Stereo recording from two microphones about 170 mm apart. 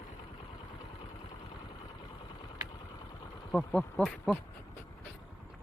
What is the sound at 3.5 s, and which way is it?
Speech, 5° left (ahead or behind).